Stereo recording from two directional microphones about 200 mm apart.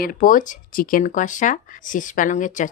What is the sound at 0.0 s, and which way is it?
Speech, 45° left (ahead or behind).